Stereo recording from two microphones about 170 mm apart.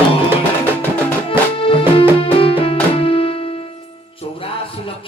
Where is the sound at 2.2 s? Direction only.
35° left (ahead or behind).